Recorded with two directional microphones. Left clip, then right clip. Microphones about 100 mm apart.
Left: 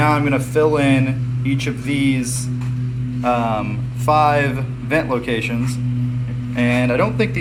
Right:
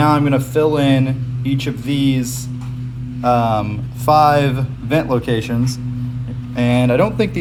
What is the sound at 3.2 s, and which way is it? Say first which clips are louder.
Speech: right 3 dB; 25° right (ahead or behind).